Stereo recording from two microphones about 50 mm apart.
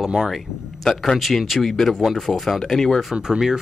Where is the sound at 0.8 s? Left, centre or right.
Centre.